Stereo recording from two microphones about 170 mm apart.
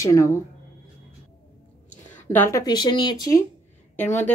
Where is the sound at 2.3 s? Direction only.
15° left (ahead or behind).